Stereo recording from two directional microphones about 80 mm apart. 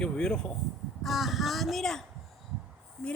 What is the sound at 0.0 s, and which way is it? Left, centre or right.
Speech, centre.